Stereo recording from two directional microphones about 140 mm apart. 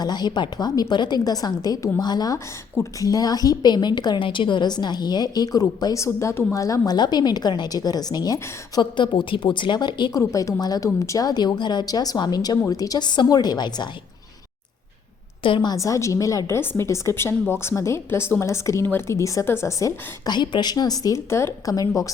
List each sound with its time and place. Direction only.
0.0 s a woman's voice: 30° left (ahead or behind)
15.4 s a woman's voice: 35° left (ahead or behind)
15.7 s a woman's voice: 25° left (ahead or behind)